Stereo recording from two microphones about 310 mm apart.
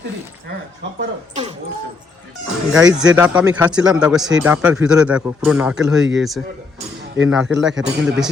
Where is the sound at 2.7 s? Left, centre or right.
Centre.